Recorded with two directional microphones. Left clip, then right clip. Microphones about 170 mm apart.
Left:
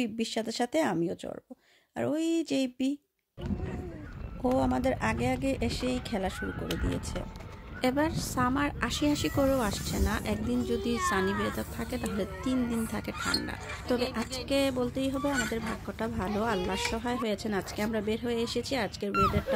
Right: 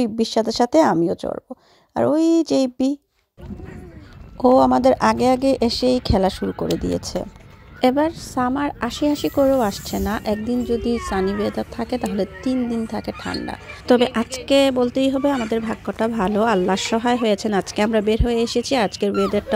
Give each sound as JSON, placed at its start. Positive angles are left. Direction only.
{"t": 0.0, "sound": "speech", "side_deg": -35}
{"t": 4.4, "sound": "speech", "side_deg": -40}
{"t": 7.8, "sound": "a woman's voice", "side_deg": -30}
{"t": 11.4, "sound": "speech", "side_deg": -35}
{"t": 13.5, "sound": "speech", "side_deg": -45}